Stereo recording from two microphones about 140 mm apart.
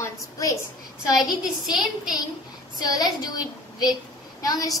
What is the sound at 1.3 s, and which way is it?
Speech, 5° right (ahead or behind).